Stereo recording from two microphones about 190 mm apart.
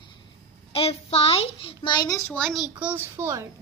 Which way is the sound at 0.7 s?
30° left (ahead or behind).